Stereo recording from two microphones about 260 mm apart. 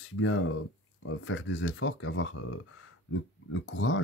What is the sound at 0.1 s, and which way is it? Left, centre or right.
Speech, left.